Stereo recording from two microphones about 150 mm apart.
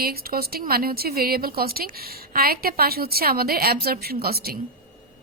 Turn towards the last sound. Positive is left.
turn(degrees=-90)